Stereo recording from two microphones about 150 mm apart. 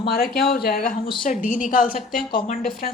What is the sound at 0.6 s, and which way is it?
Speech, 75° left (ahead or behind).